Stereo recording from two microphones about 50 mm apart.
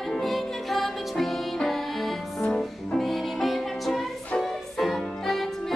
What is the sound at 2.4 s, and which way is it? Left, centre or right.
Music, centre.